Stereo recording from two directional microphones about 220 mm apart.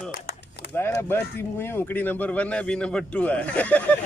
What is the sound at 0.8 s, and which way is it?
Speech, 10° left (ahead or behind).